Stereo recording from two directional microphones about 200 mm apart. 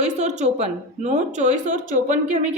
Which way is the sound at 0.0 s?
35° right (ahead or behind).